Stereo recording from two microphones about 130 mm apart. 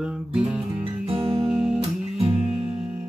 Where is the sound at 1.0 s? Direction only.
45° right (ahead or behind).